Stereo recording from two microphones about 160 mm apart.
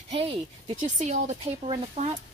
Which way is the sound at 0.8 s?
50° right (ahead or behind).